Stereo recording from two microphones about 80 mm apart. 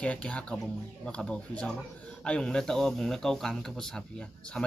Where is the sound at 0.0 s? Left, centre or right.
Centre.